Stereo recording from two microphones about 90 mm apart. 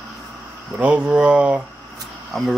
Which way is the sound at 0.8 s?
15° right (ahead or behind).